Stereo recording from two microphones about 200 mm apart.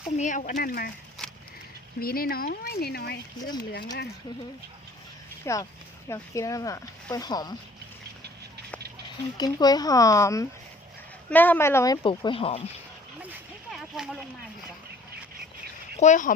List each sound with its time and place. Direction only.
0.2 s speech: 40° left (ahead or behind)
1.2 s a sound: centre (ahead or behind)
2.0 s speech: 50° left (ahead or behind)
5.5 s speech: 15° left (ahead or behind)
9.4 s speech: 20° left (ahead or behind)
12.0 s speech: 25° left (ahead or behind)
13.7 s a sound: centre (ahead or behind)
16.0 s speech: 40° left (ahead or behind)